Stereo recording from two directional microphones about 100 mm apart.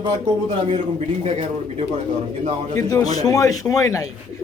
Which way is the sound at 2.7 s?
35° left (ahead or behind).